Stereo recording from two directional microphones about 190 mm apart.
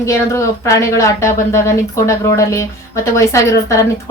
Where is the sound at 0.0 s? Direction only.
15° left (ahead or behind).